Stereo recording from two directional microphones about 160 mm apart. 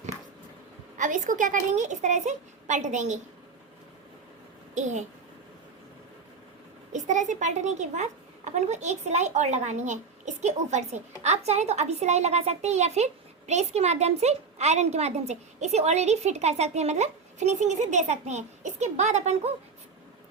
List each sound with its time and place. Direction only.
0.9 s a woman's voice: 50° right (ahead or behind)
4.7 s a child's voice: 45° right (ahead or behind)
6.9 s a woman's voice: 50° right (ahead or behind)